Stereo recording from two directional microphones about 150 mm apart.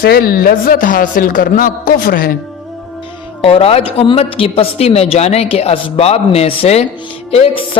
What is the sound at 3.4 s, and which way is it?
A man's voice, 40° left (ahead or behind).